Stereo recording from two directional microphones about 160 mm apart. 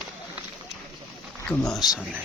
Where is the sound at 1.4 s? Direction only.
5° left (ahead or behind).